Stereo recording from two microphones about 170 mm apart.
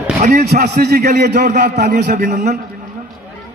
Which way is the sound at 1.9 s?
55° right (ahead or behind).